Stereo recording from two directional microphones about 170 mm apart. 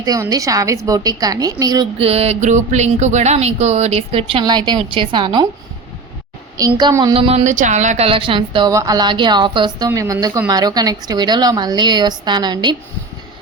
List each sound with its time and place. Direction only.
0.0 s a woman's voice: 20° right (ahead or behind)
2.0 s speech: 35° right (ahead or behind)
6.6 s a woman's voice: 25° right (ahead or behind)